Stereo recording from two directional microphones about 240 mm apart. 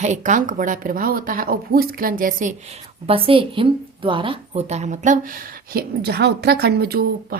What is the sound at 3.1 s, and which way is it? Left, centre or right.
A woman's voice, right.